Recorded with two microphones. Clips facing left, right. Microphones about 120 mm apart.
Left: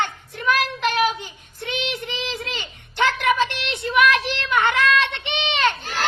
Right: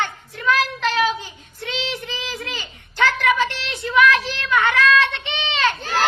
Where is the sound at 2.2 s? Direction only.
25° left (ahead or behind).